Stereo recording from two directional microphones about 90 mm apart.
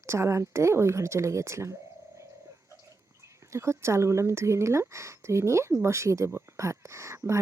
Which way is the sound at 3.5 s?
30° right (ahead or behind).